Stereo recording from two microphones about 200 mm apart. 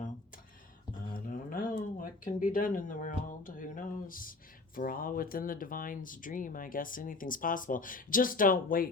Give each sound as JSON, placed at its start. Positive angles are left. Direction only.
{"t": 1.1, "sound": "speech", "side_deg": 45}